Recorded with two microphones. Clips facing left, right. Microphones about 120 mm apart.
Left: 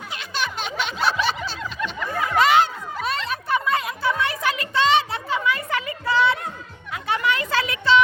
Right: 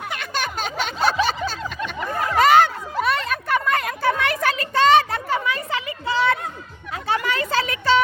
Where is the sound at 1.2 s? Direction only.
45° right (ahead or behind).